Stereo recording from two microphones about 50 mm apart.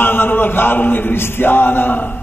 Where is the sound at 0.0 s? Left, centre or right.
Left.